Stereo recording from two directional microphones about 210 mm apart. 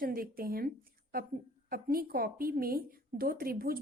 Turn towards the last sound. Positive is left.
turn(degrees=-45)  # may be behind; listen again after turning